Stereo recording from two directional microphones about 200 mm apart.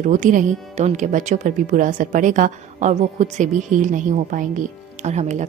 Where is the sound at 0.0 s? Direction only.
40° right (ahead or behind).